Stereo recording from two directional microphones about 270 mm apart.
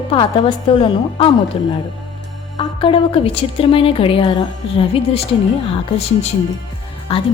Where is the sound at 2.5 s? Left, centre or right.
Centre.